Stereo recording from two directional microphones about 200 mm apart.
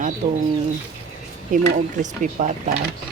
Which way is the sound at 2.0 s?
35° right (ahead or behind).